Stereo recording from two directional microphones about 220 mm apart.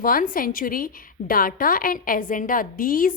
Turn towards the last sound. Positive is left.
turn(degrees=40)  # may be behind; listen again after turning